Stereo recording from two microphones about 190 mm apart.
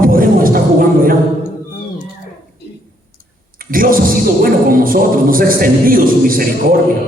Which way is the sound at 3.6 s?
50° right (ahead or behind).